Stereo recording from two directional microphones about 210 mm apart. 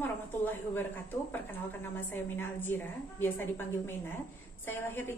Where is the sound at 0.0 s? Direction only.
10° left (ahead or behind).